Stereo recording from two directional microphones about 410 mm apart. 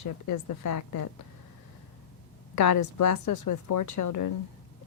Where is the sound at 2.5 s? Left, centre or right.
Left.